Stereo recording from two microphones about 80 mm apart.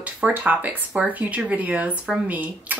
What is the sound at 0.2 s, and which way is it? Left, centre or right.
A woman's voice, centre.